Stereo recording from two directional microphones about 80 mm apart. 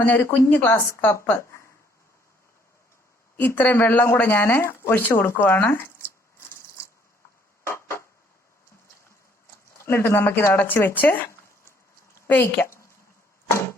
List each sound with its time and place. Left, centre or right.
0.0 s speech: left
3.3 s speech: left
7.6 s a sound: left
9.8 s speech: left
12.3 s speech: left